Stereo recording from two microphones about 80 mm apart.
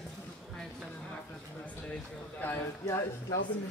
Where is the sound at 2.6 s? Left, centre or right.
Left.